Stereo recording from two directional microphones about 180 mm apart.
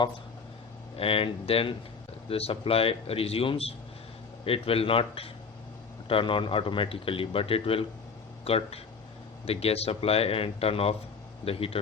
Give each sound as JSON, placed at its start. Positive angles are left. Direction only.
{"t": 0.9, "sound": "speech", "side_deg": 30}